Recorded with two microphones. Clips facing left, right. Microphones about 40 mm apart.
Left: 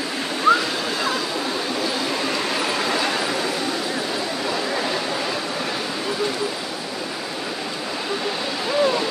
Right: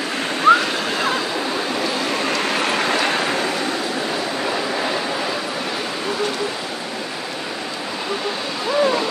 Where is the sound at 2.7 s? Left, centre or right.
Right.